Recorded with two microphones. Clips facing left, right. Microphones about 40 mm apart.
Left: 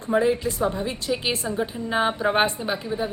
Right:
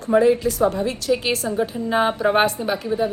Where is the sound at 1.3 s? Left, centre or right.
Left.